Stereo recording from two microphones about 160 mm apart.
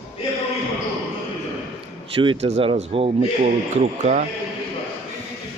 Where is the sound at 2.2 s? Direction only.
35° right (ahead or behind).